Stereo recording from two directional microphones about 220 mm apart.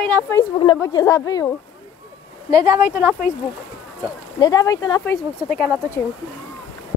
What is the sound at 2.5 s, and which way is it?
Speech, 15° right (ahead or behind).